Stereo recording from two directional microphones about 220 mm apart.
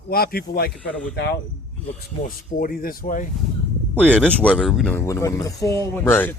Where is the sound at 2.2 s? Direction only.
40° left (ahead or behind).